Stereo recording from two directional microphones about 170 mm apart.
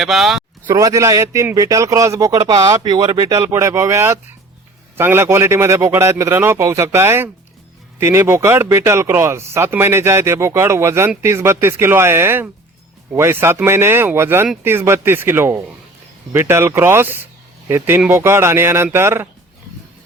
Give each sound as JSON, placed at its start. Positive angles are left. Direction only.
{"t": 0.0, "sound": "speech", "side_deg": 0}
{"t": 0.7, "sound": "a man's voice", "side_deg": -20}